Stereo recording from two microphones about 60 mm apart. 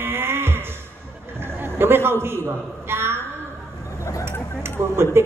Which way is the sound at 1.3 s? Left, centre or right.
Right.